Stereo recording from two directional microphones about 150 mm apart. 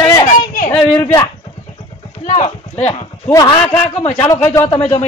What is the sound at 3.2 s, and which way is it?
A woman's voice, 25° left (ahead or behind).